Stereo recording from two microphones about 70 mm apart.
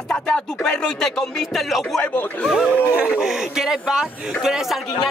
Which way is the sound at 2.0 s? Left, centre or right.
Left.